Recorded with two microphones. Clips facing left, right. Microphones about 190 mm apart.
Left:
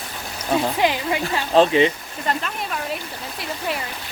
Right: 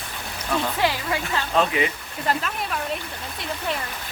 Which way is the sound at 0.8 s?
20° left (ahead or behind).